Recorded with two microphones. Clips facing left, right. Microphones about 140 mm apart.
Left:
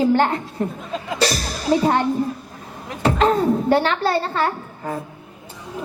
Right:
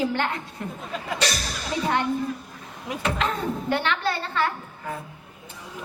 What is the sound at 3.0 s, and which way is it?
A woman's voice, 35° left (ahead or behind).